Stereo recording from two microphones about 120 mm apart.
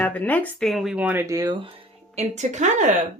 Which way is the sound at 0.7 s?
Centre (ahead or behind).